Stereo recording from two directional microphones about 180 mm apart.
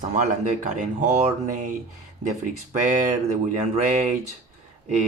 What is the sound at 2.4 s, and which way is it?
Speech, 45° right (ahead or behind).